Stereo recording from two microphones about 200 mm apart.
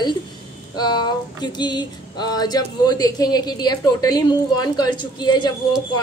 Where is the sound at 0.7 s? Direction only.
20° left (ahead or behind).